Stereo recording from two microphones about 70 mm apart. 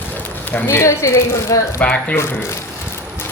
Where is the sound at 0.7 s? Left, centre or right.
Left.